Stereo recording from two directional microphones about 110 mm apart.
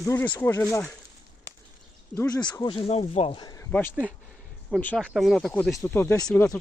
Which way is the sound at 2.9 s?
70° left (ahead or behind).